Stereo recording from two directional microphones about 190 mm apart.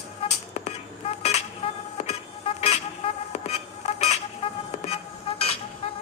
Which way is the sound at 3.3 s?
35° left (ahead or behind).